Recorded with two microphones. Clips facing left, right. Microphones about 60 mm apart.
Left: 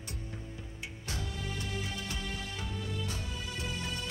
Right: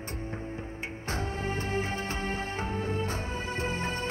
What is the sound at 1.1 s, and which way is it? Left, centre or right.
Music, right.